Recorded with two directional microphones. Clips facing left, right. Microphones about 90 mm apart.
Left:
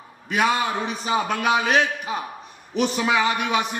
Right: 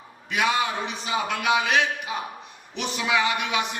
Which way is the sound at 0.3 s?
40° left (ahead or behind).